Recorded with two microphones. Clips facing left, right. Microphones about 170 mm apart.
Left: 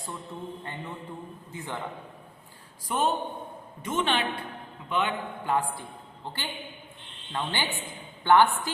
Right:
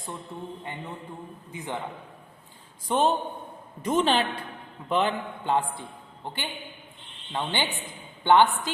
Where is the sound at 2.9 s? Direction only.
30° right (ahead or behind).